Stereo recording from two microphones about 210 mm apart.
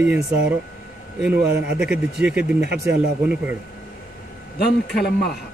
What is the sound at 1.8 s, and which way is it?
Speech, 5° right (ahead or behind).